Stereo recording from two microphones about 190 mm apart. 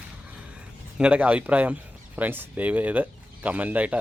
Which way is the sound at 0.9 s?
5° right (ahead or behind).